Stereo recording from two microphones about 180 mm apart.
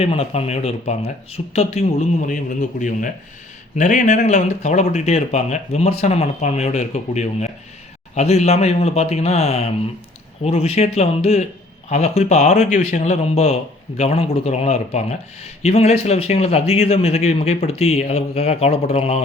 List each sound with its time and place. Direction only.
0.0 s speech: 35° left (ahead or behind)